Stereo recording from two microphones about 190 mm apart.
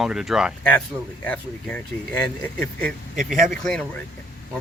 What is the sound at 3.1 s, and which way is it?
Speech, 45° right (ahead or behind).